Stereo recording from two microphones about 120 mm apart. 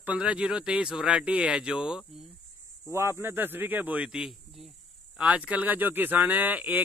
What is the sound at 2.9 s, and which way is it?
A man's voice, 25° right (ahead or behind).